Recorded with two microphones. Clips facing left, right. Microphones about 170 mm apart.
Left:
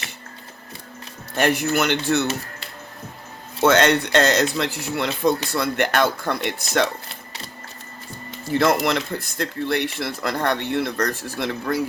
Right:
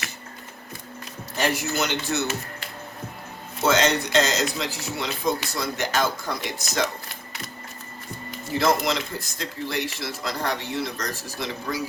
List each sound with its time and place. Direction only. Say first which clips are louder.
1.4 s speech: left 5 dB; 55° left (ahead or behind)
3.6 s speech: left 5 dB; 60° left (ahead or behind)
8.5 s speech: left 3 dB; 60° left (ahead or behind)